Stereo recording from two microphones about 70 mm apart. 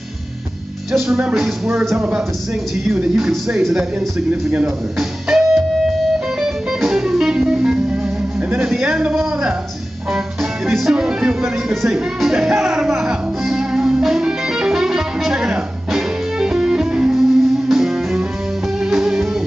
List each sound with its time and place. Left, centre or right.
0.9 s speech: centre
4.9 s music: centre
8.4 s music: right
10.7 s music: centre